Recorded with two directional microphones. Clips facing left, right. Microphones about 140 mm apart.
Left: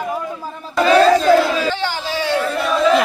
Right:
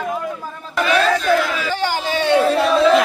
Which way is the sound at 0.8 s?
35° left (ahead or behind).